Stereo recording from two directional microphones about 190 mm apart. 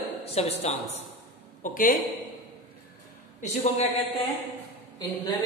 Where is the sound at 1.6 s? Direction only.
45° left (ahead or behind).